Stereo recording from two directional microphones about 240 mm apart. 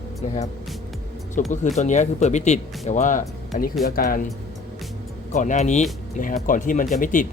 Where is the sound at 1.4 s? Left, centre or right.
Left.